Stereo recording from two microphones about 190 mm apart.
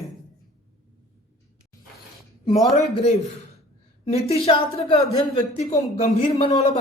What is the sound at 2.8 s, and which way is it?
A man's voice, 35° left (ahead or behind).